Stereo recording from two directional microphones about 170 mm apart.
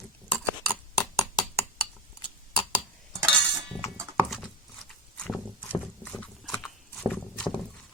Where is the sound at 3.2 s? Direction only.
5° left (ahead or behind).